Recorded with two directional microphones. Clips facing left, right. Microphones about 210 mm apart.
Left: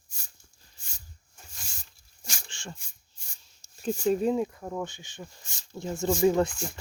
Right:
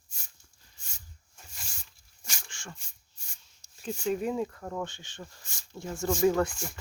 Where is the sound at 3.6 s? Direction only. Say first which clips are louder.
Left 6 dB; 35° left (ahead or behind).